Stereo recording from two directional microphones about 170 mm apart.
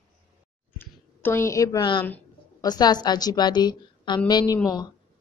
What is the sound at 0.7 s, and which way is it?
A woman's voice, 15° left (ahead or behind).